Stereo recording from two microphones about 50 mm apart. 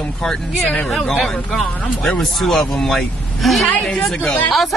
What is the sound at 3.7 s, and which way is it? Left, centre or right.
Speech, left.